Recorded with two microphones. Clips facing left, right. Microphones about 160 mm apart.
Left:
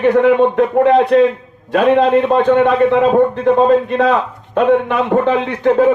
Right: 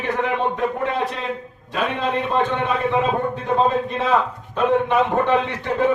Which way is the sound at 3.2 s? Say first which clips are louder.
Left 9 dB; 60° left (ahead or behind).